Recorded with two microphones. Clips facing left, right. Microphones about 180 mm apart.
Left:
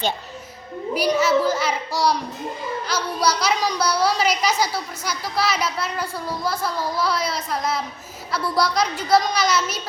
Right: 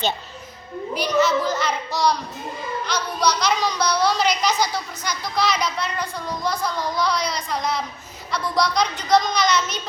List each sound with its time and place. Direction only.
0.9 s a woman's voice: 10° left (ahead or behind)